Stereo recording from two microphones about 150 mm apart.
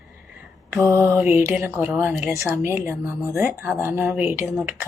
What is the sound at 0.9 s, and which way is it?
Speech, 15° right (ahead or behind).